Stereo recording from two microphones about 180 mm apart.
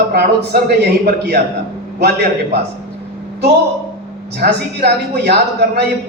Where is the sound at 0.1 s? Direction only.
60° right (ahead or behind).